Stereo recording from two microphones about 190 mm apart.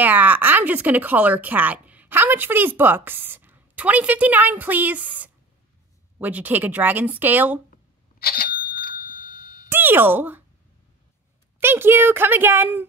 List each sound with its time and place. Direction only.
0.0 s speech: 10° right (ahead or behind)
7.7 s a sound: 50° left (ahead or behind)
9.7 s speech: 10° right (ahead or behind)
11.6 s speech: 10° right (ahead or behind)